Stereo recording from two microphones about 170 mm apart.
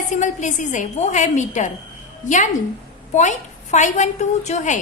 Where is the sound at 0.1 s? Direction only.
45° left (ahead or behind).